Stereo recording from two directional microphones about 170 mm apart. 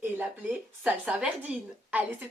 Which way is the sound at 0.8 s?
10° right (ahead or behind).